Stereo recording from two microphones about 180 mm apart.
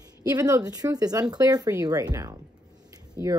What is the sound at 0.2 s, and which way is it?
A child's voice, 20° right (ahead or behind).